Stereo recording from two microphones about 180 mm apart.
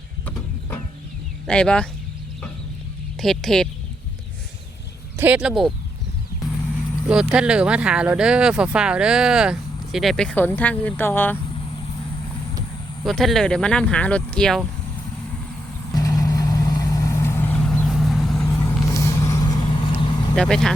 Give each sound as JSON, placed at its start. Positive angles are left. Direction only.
{"t": 1.5, "sound": "speech", "side_deg": 5}
{"t": 3.2, "sound": "speech", "side_deg": 0}
{"t": 5.1, "sound": "speech", "side_deg": -10}
{"t": 7.1, "sound": "speech", "side_deg": -5}
{"t": 13.1, "sound": "speech", "side_deg": 0}
{"t": 15.9, "sound": "vehicle", "side_deg": 20}
{"t": 18.4, "sound": "vehicle", "side_deg": 15}
{"t": 20.3, "sound": "speech", "side_deg": 5}